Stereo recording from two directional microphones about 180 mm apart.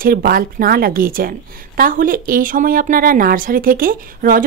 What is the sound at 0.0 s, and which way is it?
A woman's voice, 55° right (ahead or behind).